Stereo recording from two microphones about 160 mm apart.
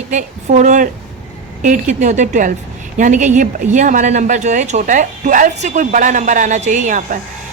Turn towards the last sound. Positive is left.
turn(degrees=-55)  # may be behind; listen again after turning